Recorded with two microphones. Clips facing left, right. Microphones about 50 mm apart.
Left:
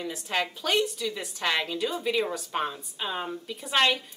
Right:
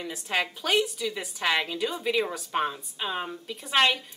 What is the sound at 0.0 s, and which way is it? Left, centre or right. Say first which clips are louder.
Speech: even; centre.